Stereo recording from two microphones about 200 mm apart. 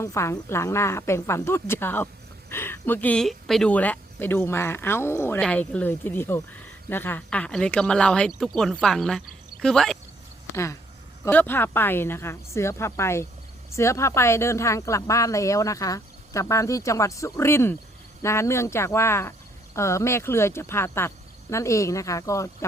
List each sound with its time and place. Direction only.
0.0 s speech: 15° left (ahead or behind)
10.5 s speech: 15° left (ahead or behind)